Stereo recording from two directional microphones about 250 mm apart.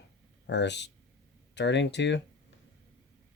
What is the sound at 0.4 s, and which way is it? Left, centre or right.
Speech, left.